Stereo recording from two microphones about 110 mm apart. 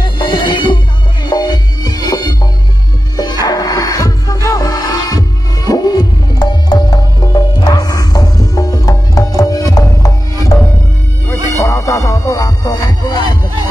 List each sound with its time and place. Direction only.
0.0 s music: 45° left (ahead or behind)